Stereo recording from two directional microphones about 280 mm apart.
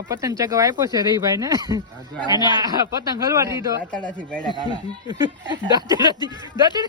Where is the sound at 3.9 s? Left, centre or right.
Centre.